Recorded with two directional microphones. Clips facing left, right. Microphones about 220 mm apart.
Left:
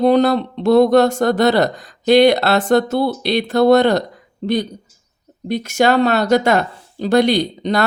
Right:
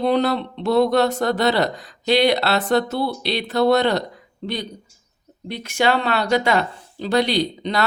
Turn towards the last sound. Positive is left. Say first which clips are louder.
# left 4 dB
turn(degrees=45)  # may be behind; listen again after turning